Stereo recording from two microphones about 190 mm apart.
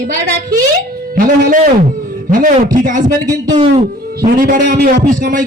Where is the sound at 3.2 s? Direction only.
20° right (ahead or behind).